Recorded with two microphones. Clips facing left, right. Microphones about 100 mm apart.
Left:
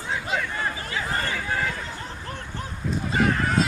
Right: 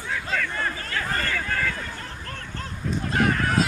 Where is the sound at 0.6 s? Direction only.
15° left (ahead or behind).